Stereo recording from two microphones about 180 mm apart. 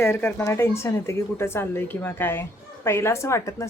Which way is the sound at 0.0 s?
15° left (ahead or behind).